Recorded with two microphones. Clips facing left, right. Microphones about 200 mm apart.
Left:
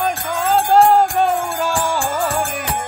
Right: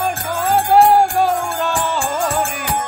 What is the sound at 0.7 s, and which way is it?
Music, 10° right (ahead or behind).